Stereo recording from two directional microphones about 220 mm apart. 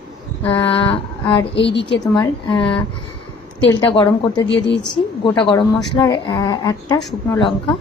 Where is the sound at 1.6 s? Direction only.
55° left (ahead or behind).